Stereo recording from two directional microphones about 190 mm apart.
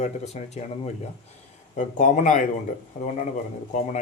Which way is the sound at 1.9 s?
40° left (ahead or behind).